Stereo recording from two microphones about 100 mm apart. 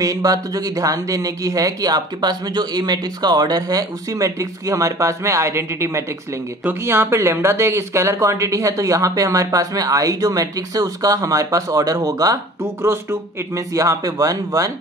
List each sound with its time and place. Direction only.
0.0 s speech: 35° right (ahead or behind)
12.6 s speech: 25° right (ahead or behind)